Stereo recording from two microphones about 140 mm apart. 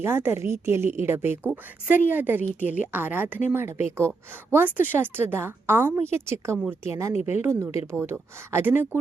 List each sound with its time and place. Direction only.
0.0 s a woman's voice: 15° right (ahead or behind)
7.2 s a woman's voice: 50° left (ahead or behind)
7.4 s a woman's voice: 20° right (ahead or behind)